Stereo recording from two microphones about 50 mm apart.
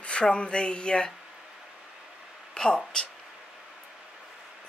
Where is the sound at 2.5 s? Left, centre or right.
Centre.